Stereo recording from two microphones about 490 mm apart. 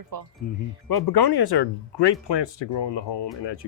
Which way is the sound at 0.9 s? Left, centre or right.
Left.